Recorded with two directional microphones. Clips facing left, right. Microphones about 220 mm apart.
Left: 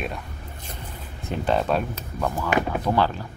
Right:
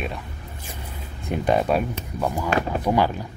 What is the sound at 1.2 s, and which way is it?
Speech, 15° right (ahead or behind).